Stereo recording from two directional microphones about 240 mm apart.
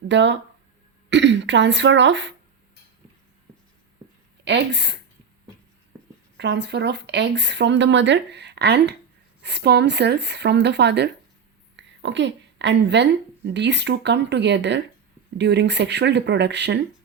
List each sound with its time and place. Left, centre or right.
0.1 s speech: right
4.4 s speech: right
6.3 s a woman's voice: right